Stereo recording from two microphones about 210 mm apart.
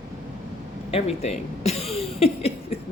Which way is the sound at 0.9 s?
30° left (ahead or behind).